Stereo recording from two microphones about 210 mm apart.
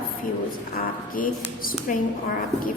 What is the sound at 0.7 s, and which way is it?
Speech, 45° left (ahead or behind).